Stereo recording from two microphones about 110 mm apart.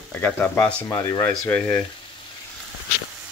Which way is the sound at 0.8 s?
30° left (ahead or behind).